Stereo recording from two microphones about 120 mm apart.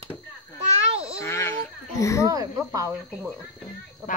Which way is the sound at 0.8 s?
55° right (ahead or behind).